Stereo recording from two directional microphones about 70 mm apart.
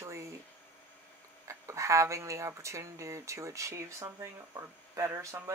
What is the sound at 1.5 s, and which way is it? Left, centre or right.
Speech, right.